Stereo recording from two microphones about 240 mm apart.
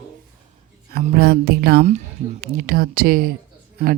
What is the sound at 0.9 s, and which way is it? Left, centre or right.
Speech, right.